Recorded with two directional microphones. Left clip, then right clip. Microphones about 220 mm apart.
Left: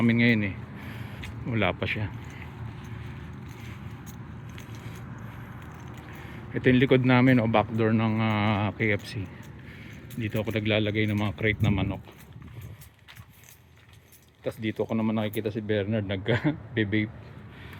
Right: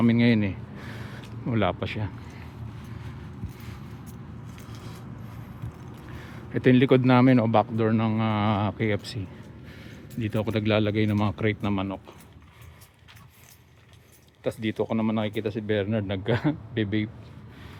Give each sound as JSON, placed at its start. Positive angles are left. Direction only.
{"t": 0.0, "sound": "speech", "side_deg": -10}
{"t": 6.5, "sound": "speech", "side_deg": -10}
{"t": 14.4, "sound": "speech", "side_deg": -15}